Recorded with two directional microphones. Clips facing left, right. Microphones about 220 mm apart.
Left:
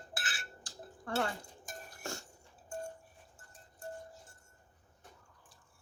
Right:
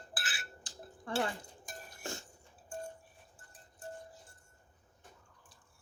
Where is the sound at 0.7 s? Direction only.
25° right (ahead or behind).